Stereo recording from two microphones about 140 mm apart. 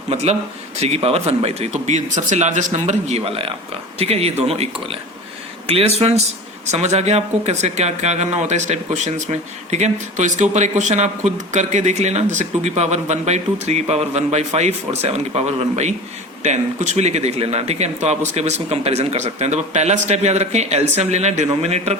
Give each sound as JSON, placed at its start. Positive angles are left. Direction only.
{"t": 0.1, "sound": "speech", "side_deg": -50}